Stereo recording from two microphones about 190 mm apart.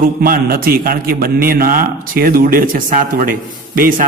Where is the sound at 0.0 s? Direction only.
50° right (ahead or behind).